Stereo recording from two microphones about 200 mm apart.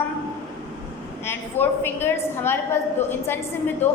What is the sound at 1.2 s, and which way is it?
A woman's voice, 10° left (ahead or behind).